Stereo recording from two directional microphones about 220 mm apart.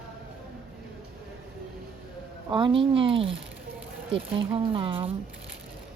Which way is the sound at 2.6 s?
25° right (ahead or behind).